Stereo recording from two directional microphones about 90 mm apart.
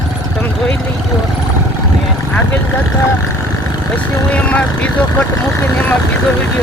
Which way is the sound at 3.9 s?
15° left (ahead or behind).